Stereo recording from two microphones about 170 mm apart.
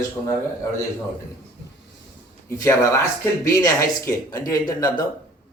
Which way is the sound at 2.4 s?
15° left (ahead or behind).